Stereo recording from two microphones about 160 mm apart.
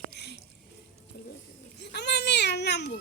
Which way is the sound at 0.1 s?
90° left.